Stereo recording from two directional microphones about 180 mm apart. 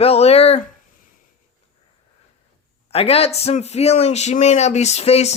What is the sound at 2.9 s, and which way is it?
A man's voice, 35° left (ahead or behind).